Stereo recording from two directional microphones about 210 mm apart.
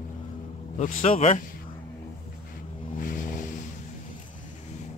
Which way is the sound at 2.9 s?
40° left (ahead or behind).